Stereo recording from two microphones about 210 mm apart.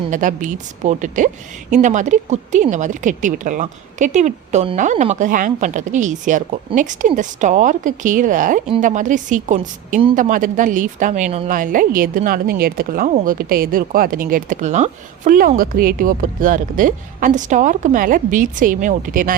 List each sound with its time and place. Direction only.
0.1 s speech: 40° right (ahead or behind)